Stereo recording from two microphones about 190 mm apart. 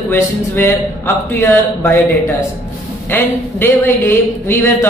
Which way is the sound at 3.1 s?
10° left (ahead or behind).